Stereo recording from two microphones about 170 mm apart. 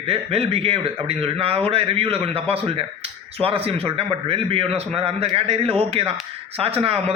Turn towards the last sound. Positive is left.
turn(degrees=-35)  # may be behind; listen again after turning